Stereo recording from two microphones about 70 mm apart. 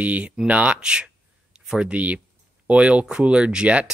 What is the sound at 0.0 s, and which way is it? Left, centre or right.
Speech, centre.